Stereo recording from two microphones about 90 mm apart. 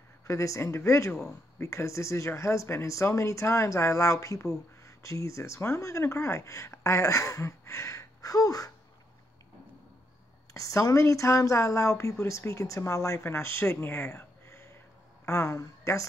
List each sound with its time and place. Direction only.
0.3 s speech: 35° left (ahead or behind)
10.5 s a woman's voice: 40° left (ahead or behind)